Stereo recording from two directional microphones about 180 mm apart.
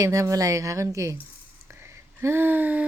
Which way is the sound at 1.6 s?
15° right (ahead or behind).